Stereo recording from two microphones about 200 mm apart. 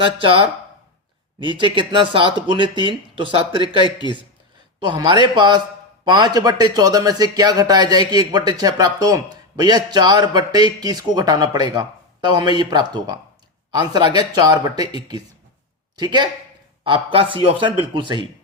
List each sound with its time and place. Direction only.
0.0 s speech: 25° right (ahead or behind)
3.8 s speech: 20° left (ahead or behind)
4.8 s speech: 20° right (ahead or behind)